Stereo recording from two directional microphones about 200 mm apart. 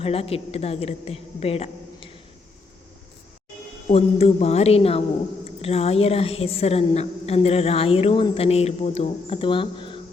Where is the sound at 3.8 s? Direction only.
30° left (ahead or behind).